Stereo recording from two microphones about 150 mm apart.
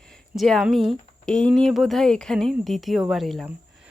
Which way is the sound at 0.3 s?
Centre (ahead or behind).